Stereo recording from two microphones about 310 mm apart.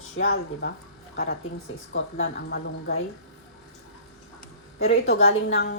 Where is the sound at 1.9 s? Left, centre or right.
Left.